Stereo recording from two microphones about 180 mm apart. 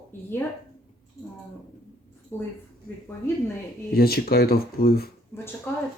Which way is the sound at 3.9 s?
60° left (ahead or behind).